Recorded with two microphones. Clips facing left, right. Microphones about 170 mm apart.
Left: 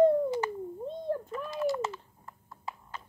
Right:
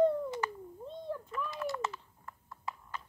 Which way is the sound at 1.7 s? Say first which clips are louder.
Left 4 dB; 20° left (ahead or behind).